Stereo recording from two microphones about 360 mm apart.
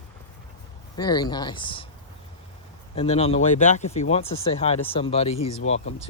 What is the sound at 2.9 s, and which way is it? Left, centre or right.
Speech, centre.